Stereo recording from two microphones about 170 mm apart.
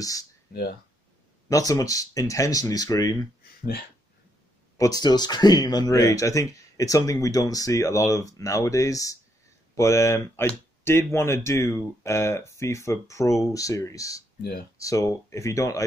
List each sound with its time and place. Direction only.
0.0 s speech: 20° left (ahead or behind)
0.5 s speech: 65° left (ahead or behind)
1.5 s speech: 20° left (ahead or behind)
4.7 s speech: 20° left (ahead or behind)